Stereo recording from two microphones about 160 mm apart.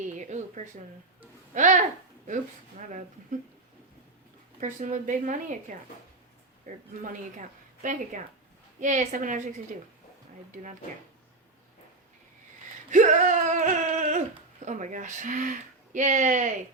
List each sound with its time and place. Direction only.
0.0 s a sound: 50° right (ahead or behind)
1.5 s speech: 50° right (ahead or behind)
4.6 s speech: 50° right (ahead or behind)
12.9 s speech: 50° right (ahead or behind)